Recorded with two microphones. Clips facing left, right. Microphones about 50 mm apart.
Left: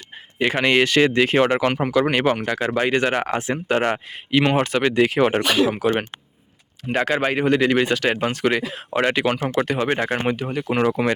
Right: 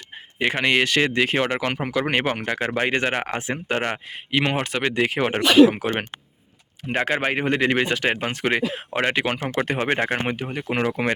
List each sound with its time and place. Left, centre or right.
0.3 s speech: centre
1.7 s speech: centre
2.0 s speech: right
5.7 s speech: right
9.0 s speech: centre
9.6 s speech: right
10.1 s speech: right